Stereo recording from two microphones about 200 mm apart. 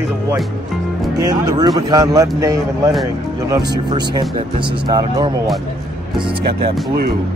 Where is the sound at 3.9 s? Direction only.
25° right (ahead or behind).